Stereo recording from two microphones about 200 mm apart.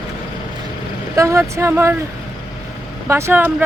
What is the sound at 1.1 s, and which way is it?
Speech, 15° right (ahead or behind).